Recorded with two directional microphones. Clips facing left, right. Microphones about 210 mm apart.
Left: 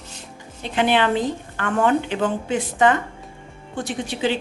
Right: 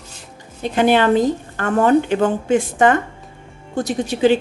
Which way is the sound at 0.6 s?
45° right (ahead or behind).